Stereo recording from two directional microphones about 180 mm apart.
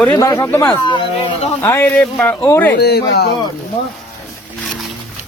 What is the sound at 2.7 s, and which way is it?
Speech, 65° left (ahead or behind).